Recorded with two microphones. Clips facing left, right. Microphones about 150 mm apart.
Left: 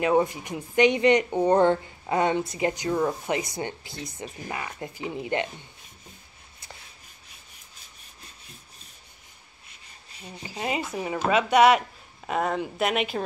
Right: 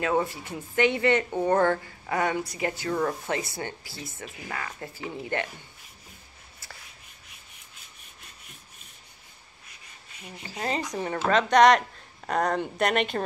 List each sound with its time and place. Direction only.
0.0 s a woman's voice: 15° left (ahead or behind)
10.6 s speech: 5° left (ahead or behind)